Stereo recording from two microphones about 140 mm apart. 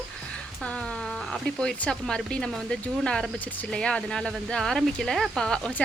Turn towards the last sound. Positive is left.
turn(degrees=5)  # may be behind; listen again after turning